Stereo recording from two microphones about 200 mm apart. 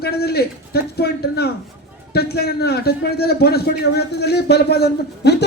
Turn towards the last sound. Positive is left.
turn(degrees=55)  # may be behind; listen again after turning